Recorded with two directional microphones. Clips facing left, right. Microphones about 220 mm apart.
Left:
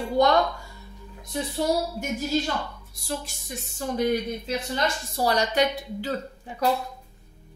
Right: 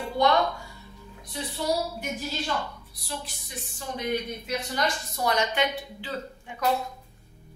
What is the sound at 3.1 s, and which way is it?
Speech, 45° left (ahead or behind).